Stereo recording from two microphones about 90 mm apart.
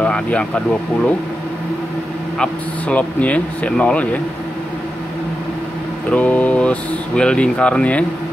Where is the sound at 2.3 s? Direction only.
15° left (ahead or behind).